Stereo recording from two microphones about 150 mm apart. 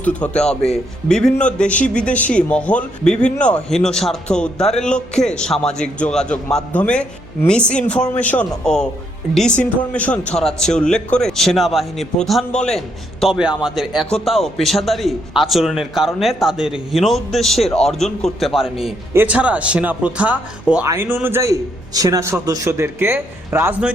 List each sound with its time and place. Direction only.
0.0 s a man's voice: 10° left (ahead or behind); by 23.9 s 15° right (ahead or behind)